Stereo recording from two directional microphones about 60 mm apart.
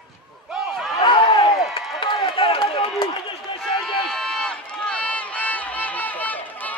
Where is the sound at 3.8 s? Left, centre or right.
Centre.